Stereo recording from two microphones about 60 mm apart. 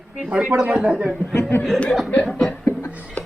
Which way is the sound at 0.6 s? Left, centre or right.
Centre.